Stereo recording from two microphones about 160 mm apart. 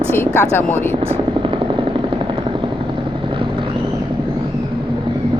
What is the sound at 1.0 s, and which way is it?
Vehicle, 35° right (ahead or behind).